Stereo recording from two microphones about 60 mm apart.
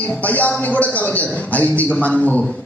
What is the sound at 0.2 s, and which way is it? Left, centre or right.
A man's voice, left.